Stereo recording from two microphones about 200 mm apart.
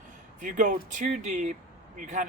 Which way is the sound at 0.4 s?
40° right (ahead or behind).